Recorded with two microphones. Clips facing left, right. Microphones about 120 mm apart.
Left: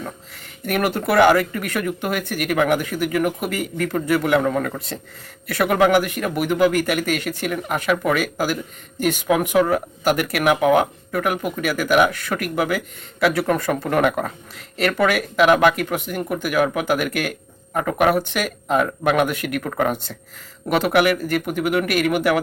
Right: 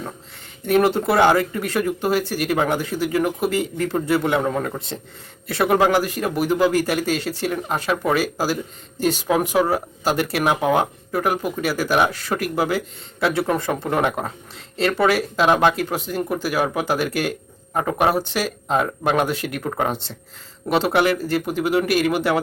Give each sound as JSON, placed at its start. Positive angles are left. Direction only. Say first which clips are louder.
{"t": 0.6, "sound": "a man's voice", "louder": "right 4 dB", "side_deg": -25}